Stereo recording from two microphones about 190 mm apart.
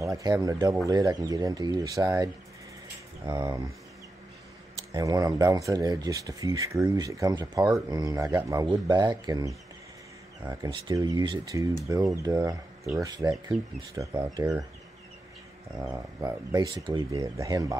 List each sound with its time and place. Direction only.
0.2 s speech: 20° right (ahead or behind)
3.3 s speech: 25° right (ahead or behind)
4.9 s speech: 20° right (ahead or behind)
13.5 s speech: centre (ahead or behind)
13.9 s speech: 25° right (ahead or behind)
15.9 s speech: 20° right (ahead or behind)